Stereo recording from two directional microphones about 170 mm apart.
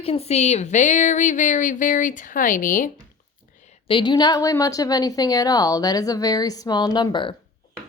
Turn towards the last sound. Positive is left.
turn(degrees=25)  # may be behind; listen again after turning